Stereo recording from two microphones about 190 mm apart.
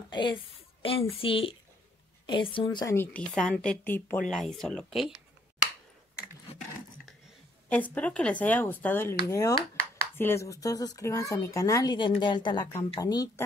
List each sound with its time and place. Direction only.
0.1 s a woman's voice: 25° left (ahead or behind); by 5.2 s centre (ahead or behind)
7.7 s speech: 10° left (ahead or behind)